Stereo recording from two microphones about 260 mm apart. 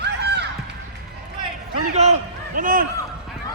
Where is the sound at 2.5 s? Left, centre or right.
Right.